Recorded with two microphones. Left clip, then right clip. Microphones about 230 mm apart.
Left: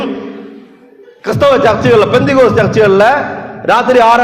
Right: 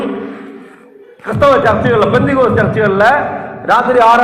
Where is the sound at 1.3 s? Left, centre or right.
Left.